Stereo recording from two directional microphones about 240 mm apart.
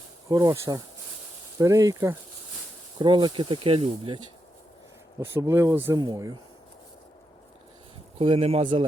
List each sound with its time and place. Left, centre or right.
0.3 s speech: centre
5.2 s speech: centre
8.2 s speech: right